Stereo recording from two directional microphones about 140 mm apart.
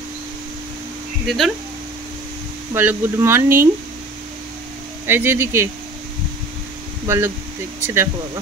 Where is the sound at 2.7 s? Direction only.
15° right (ahead or behind).